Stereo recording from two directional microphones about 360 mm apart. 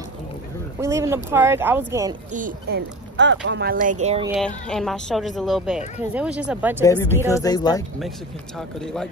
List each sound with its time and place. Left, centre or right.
0.7 s speech: centre
2.3 s speech: right
4.0 s speech: centre
4.6 s speech: centre
6.8 s speech: centre